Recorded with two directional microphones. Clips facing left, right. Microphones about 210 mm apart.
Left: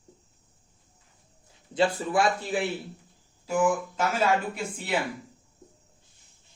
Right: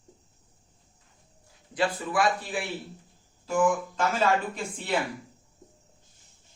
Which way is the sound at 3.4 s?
10° left (ahead or behind).